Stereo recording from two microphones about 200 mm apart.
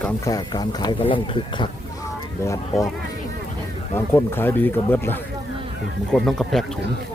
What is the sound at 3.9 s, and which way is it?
Speech, 10° left (ahead or behind).